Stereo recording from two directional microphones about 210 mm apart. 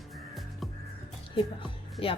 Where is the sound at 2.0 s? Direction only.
25° left (ahead or behind).